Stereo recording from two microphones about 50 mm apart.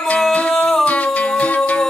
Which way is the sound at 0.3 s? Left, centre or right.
Left.